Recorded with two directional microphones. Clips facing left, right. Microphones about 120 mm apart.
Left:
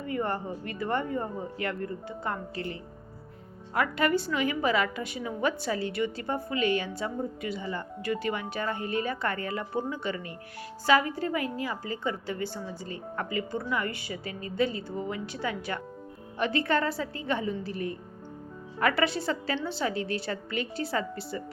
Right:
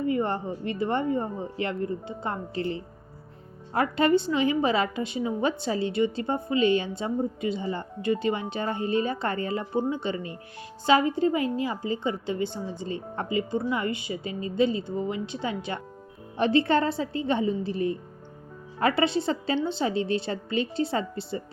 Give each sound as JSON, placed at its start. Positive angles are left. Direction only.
{"t": 0.1, "sound": "a woman's voice", "side_deg": -25}